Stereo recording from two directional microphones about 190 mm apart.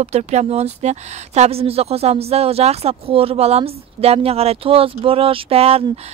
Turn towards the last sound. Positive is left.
turn(degrees=-30)  # may be behind; listen again after turning